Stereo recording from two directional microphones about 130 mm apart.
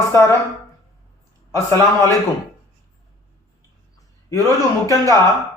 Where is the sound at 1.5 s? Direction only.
20° left (ahead or behind).